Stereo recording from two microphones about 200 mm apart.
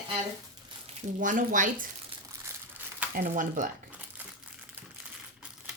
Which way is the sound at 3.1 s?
40° right (ahead or behind).